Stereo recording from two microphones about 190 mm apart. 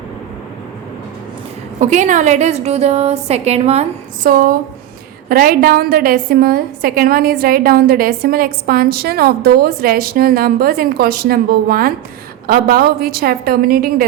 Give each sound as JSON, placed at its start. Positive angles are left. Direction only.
{"t": 1.8, "sound": "a woman's voice", "side_deg": -40}
{"t": 4.3, "sound": "a woman's voice", "side_deg": -50}